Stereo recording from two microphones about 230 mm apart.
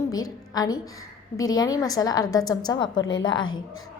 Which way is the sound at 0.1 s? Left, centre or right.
Centre.